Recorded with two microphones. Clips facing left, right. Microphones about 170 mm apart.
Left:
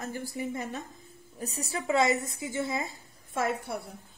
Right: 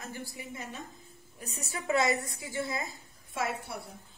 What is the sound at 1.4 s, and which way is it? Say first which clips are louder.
A woman's voice: left 3 dB; 35° left (ahead or behind).